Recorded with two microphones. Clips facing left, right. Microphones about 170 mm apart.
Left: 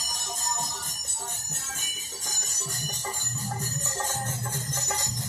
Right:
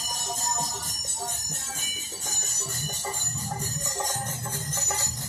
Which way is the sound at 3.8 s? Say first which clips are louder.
Right 1 dB; 15° right (ahead or behind).